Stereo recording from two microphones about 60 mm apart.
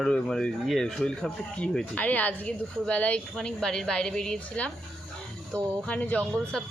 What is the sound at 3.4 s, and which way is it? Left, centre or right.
Speech, centre.